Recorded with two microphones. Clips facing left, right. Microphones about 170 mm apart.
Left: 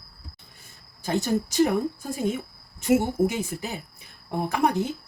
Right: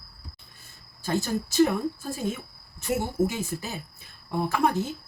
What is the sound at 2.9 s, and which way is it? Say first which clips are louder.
Speech: left 5 dB; 15° left (ahead or behind).